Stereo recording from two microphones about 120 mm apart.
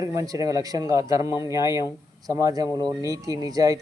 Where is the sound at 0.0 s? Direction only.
25° right (ahead or behind).